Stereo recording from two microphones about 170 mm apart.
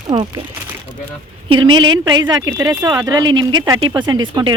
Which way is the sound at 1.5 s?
30° right (ahead or behind).